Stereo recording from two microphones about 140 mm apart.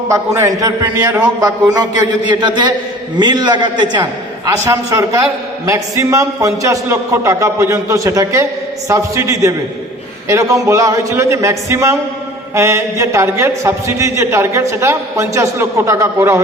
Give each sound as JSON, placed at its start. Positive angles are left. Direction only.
{"t": 0.1, "sound": "a man's voice", "side_deg": -20}
{"t": 1.0, "sound": "a man's voice", "side_deg": -15}
{"t": 1.4, "sound": "a man's voice", "side_deg": -25}
{"t": 3.2, "sound": "a man's voice", "side_deg": -30}